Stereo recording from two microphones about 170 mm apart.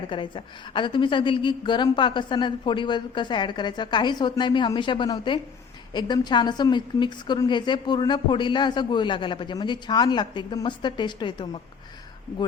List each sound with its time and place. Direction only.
0.1 s a woman's voice: 30° left (ahead or behind)